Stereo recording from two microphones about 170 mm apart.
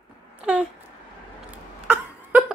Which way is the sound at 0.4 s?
10° right (ahead or behind).